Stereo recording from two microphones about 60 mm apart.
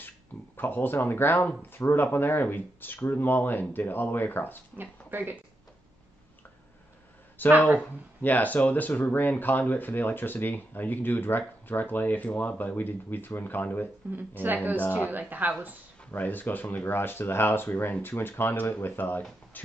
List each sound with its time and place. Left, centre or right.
0.6 s speech: left
4.7 s speech: right
7.4 s speech: left
14.1 s speech: right
16.1 s speech: left
19.6 s shuffle: left